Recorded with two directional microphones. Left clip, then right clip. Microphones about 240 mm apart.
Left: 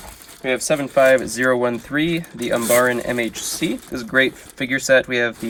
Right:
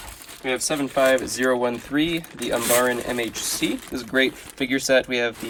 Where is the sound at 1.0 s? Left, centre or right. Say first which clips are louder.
Left 3 dB; right.